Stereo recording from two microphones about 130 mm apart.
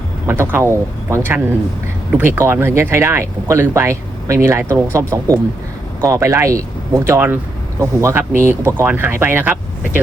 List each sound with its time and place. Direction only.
0.3 s speech: 20° right (ahead or behind)